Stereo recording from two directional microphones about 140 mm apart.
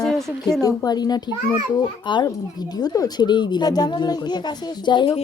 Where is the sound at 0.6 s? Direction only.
25° left (ahead or behind).